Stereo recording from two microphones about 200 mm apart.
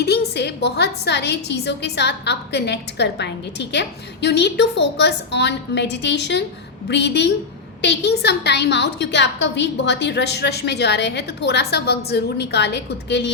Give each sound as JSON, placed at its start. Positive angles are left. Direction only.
{"t": 0.0, "sound": "a woman's voice", "side_deg": 55}